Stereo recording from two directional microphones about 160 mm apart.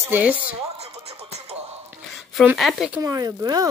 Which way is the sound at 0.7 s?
40° right (ahead or behind).